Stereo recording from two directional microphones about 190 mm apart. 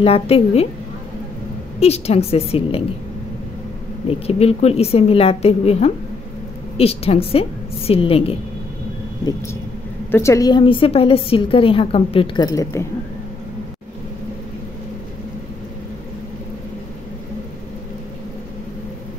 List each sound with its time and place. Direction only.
0.0 s a woman's voice: 30° left (ahead or behind)
1.8 s a woman's voice: 35° left (ahead or behind)
4.1 s a woman's voice: 30° left (ahead or behind)
10.1 s a woman's voice: 15° left (ahead or behind)
12.4 s a woman's voice: 15° left (ahead or behind)